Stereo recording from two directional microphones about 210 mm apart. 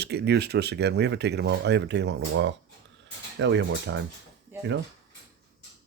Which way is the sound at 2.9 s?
60° right (ahead or behind).